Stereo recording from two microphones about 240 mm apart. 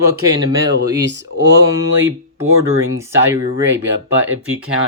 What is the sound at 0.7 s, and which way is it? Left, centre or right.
Speech, right.